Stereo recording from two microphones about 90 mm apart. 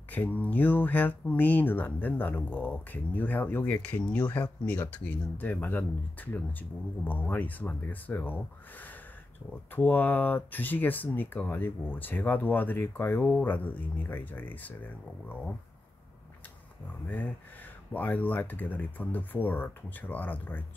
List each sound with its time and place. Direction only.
0.1 s speech: 15° left (ahead or behind)
17.9 s speech: 20° left (ahead or behind)